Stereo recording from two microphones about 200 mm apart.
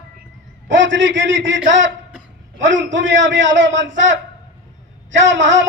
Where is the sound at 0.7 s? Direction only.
65° right (ahead or behind).